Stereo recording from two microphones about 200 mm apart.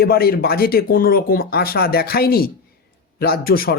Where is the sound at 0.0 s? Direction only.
50° left (ahead or behind).